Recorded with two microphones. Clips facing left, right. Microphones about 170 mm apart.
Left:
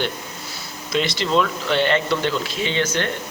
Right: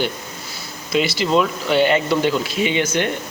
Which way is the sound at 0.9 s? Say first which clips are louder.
Right 2 dB; 5° right (ahead or behind).